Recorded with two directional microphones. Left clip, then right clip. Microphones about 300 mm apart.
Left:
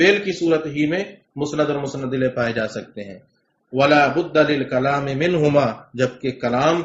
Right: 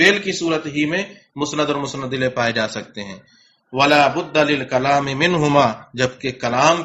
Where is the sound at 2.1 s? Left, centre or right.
Right.